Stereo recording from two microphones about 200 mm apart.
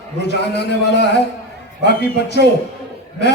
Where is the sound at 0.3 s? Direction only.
55° left (ahead or behind).